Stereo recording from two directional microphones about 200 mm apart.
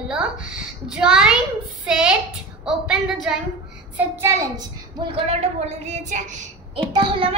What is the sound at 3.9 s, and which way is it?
A woman's voice, 15° right (ahead or behind).